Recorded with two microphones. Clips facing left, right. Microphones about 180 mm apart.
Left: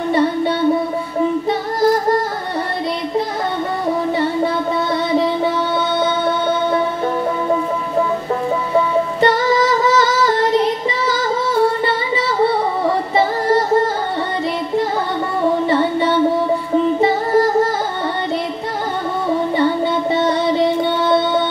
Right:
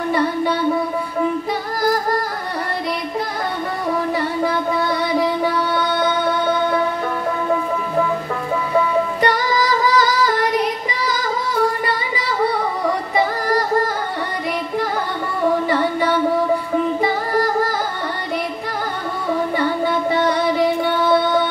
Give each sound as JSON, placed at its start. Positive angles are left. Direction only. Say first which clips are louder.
{"t": 0.1, "sound": "a sound", "louder": "left 3 dB", "side_deg": 25}
{"t": 1.5, "sound": "music", "louder": "left 4 dB", "side_deg": 25}
{"t": 5.9, "sound": "music", "louder": "left 1 dB", "side_deg": 25}
{"t": 8.7, "sound": "music", "louder": "left 1 dB", "side_deg": 25}
{"t": 12.8, "sound": "synthetic singing", "louder": "left 2 dB", "side_deg": 25}
{"t": 15.6, "sound": "music", "louder": "left 3 dB", "side_deg": 25}
{"t": 19.5, "sound": "music", "louder": "left 3 dB", "side_deg": 25}